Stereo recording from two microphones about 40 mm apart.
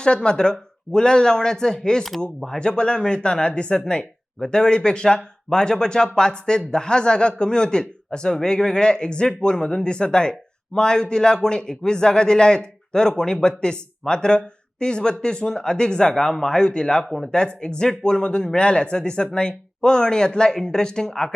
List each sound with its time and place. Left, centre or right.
0.0 s speech: left